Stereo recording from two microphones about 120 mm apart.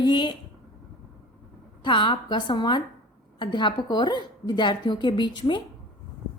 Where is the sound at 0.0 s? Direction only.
40° left (ahead or behind).